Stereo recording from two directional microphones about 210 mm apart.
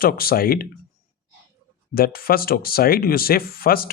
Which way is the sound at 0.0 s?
45° left (ahead or behind).